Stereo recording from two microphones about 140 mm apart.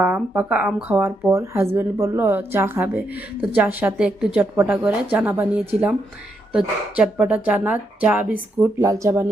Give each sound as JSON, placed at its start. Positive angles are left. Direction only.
{"t": 0.0, "sound": "speech", "side_deg": -10}